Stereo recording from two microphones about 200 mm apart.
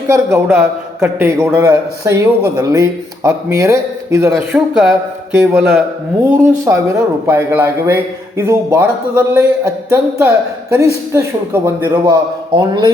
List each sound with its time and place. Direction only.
0.3 s a man's voice: centre (ahead or behind)
4.3 s speech: centre (ahead or behind)
6.3 s a man's voice: 10° right (ahead or behind)
12.5 s a man's voice: 25° right (ahead or behind)